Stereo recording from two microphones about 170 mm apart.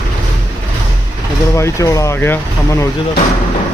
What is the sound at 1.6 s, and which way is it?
Speech, 15° left (ahead or behind).